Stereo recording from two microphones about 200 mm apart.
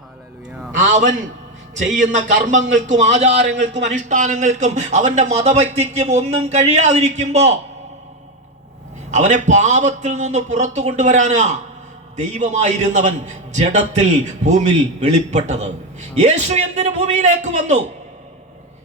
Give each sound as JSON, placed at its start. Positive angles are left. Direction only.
{"t": 0.8, "sound": "a man's voice", "side_deg": -40}
{"t": 9.0, "sound": "a man's voice", "side_deg": -35}